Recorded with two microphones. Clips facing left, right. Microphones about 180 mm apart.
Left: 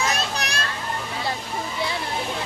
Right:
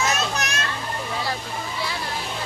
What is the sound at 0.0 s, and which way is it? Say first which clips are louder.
Children playing: right 1 dB; 35° left (ahead or behind).